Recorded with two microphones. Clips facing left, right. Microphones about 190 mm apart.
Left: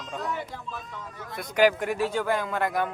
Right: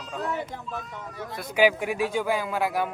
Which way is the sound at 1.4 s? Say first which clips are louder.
Even; 10° right (ahead or behind).